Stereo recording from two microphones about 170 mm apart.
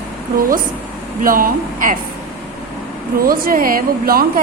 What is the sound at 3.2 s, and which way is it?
A woman's voice, 55° right (ahead or behind).